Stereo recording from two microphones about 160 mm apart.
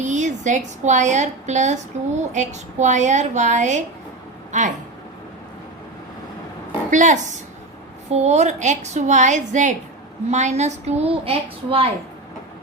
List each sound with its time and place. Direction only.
0.0 s a woman's voice: 50° right (ahead or behind)
6.9 s a woman's voice: 50° right (ahead or behind)